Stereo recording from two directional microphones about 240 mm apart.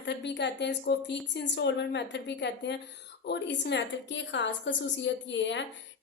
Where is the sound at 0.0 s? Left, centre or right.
Left.